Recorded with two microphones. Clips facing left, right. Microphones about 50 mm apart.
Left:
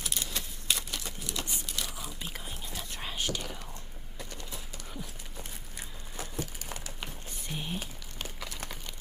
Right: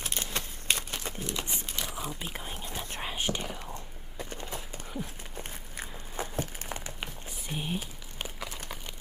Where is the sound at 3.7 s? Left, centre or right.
Right.